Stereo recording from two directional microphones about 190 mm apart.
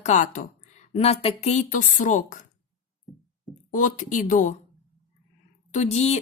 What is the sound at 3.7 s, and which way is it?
Speech, 40° left (ahead or behind).